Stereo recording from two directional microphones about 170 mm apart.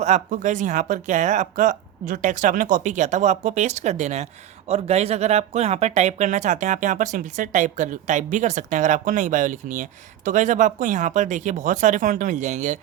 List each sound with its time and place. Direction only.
0.0 s speech: 45° right (ahead or behind)